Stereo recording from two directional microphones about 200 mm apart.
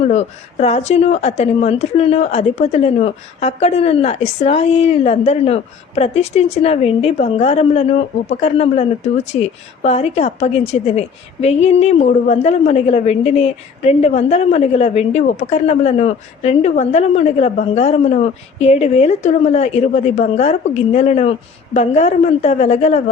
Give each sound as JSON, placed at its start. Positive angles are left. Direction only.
{"t": 0.0, "sound": "a woman's voice", "side_deg": 30}